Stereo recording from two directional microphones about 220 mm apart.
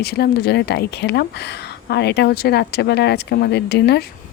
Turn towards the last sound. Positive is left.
turn(degrees=50)  # may be behind; listen again after turning